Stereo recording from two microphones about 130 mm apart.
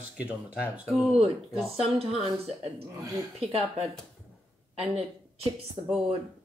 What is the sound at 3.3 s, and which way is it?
Speech, 50° right (ahead or behind).